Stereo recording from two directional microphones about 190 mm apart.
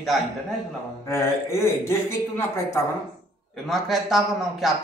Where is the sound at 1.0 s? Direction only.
15° left (ahead or behind).